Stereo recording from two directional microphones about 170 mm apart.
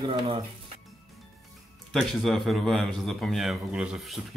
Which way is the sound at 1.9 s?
Centre (ahead or behind).